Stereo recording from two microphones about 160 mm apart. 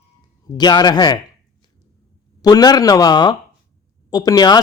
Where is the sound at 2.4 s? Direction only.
25° left (ahead or behind).